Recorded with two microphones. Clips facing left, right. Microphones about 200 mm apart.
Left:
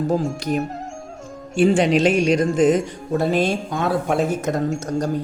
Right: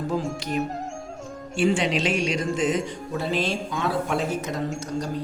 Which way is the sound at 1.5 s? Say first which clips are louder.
Left 6 dB; 45° left (ahead or behind).